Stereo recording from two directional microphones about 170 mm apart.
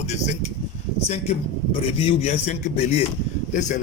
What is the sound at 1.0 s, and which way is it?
Speech, 40° left (ahead or behind).